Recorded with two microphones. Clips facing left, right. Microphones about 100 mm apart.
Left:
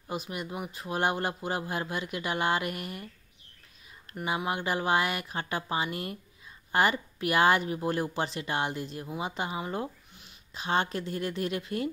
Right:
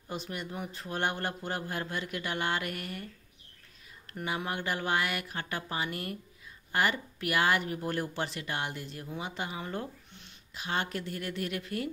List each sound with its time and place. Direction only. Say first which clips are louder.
0.1 s a man's voice: left 3 dB; 15° left (ahead or behind)
4.1 s speech: left 3 dB; 20° left (ahead or behind)
10.5 s speech: left 5 dB; 25° left (ahead or behind)